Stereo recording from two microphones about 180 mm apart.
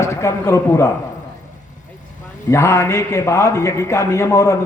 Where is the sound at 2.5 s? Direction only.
15° left (ahead or behind).